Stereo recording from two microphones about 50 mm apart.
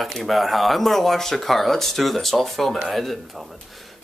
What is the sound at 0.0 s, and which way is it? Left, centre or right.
Speech, centre.